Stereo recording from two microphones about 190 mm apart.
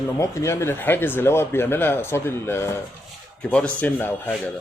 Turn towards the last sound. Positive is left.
turn(degrees=10)  # may be behind; listen again after turning